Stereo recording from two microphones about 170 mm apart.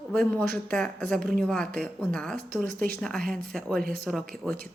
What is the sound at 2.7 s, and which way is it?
Speech, 60° right (ahead or behind).